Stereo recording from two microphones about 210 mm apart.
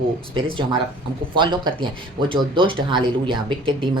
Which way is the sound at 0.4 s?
25° right (ahead or behind).